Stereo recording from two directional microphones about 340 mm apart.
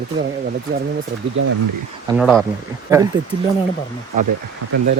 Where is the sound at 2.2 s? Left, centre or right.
Centre.